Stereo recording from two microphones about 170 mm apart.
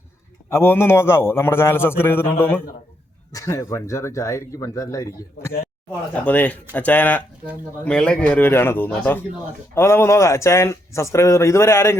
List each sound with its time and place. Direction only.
0.5 s speech: 15° left (ahead or behind)